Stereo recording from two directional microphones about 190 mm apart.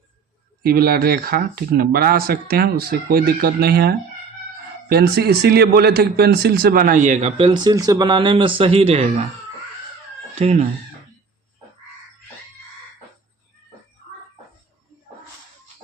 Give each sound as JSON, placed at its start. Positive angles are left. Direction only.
{"t": 0.6, "sound": "speech", "side_deg": -50}
{"t": 10.3, "sound": "speech", "side_deg": -35}